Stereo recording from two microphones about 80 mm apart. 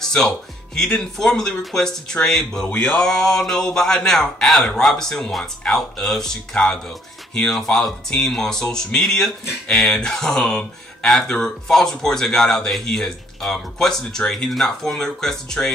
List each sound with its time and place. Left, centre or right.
0.0 s music: centre
0.7 s speech: centre
2.6 s a sound: centre
3.1 s speech: centre